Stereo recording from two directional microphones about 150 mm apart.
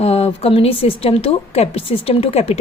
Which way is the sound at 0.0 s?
45° left (ahead or behind).